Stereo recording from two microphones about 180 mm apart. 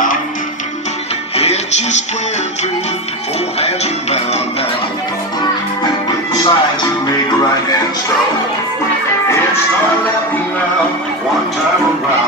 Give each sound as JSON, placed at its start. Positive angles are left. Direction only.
{"t": 1.3, "sound": "music", "side_deg": 35}
{"t": 3.6, "sound": "music", "side_deg": 35}
{"t": 6.3, "sound": "music", "side_deg": 20}